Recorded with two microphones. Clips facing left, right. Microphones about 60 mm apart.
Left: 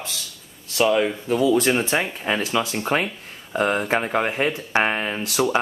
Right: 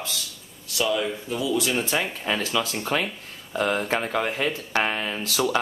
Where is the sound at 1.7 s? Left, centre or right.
Left.